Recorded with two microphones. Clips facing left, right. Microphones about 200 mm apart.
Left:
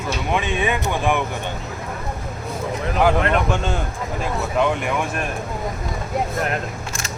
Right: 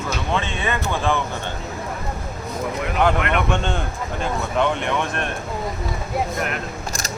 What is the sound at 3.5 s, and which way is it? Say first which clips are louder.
Speech: even; 5° left (ahead or behind).